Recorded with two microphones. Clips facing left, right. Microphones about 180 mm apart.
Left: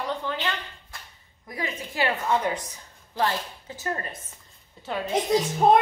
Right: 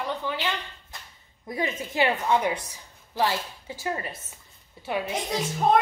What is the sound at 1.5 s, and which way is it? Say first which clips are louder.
A woman's voice: right 4 dB; 20° right (ahead or behind).